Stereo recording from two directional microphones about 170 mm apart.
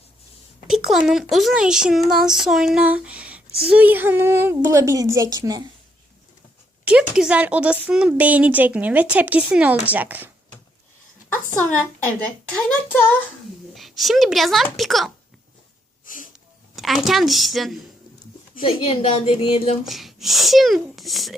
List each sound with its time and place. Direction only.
0.7 s a woman's voice: centre (ahead or behind); by 5.6 s 20° right (ahead or behind)
6.8 s a woman's voice: 5° right (ahead or behind)
11.5 s a woman's voice: 10° left (ahead or behind)
13.7 s speech: centre (ahead or behind)
16.0 s wheeze: 50° left (ahead or behind)
16.7 s speech: centre (ahead or behind)
18.6 s a woman's voice: 35° left (ahead or behind)
19.8 s speech: centre (ahead or behind)